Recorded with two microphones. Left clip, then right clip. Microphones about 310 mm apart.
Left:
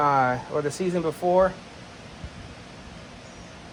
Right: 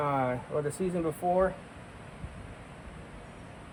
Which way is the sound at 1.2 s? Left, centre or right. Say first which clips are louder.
Left 6 dB; left.